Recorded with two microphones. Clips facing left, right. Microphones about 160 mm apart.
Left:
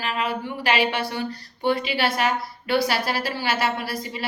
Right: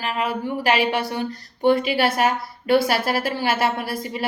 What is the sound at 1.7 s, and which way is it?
A woman's voice, 45° right (ahead or behind).